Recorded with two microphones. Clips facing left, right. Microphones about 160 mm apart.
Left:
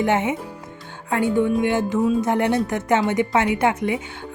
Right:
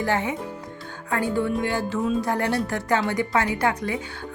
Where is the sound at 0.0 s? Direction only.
20° left (ahead or behind).